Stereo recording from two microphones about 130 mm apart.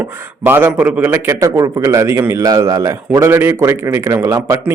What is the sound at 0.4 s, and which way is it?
A man's voice, 15° right (ahead or behind).